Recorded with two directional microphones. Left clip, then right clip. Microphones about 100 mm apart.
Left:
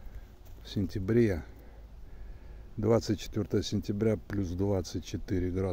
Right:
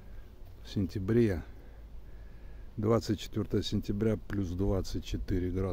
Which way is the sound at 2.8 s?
5° left (ahead or behind).